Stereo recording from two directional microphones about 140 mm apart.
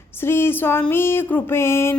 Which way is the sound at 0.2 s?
15° left (ahead or behind).